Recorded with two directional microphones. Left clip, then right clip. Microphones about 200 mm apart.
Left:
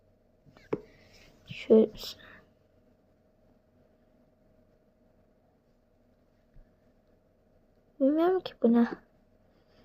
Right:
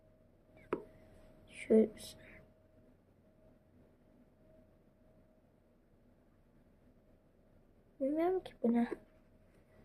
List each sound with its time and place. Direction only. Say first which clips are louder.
1.6 s speech: left 8 dB; 10° left (ahead or behind)
7.9 s a woman's voice: left 9 dB; 15° left (ahead or behind)